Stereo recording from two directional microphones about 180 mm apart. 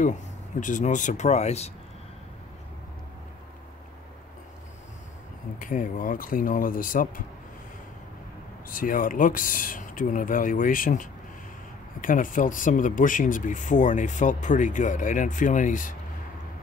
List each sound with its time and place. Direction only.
0.6 s speech: 45° left (ahead or behind)
5.6 s speech: 50° left (ahead or behind)
8.6 s speech: 50° left (ahead or behind)